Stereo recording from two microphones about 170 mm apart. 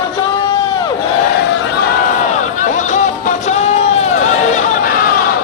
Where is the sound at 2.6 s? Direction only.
45° left (ahead or behind).